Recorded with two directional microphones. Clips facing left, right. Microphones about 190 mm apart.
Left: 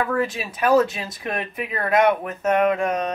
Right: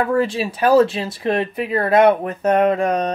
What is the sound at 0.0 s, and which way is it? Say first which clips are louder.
Speech: right 5 dB; 30° right (ahead or behind).